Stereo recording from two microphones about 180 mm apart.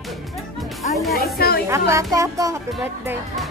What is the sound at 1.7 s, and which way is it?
Speech, 15° right (ahead or behind).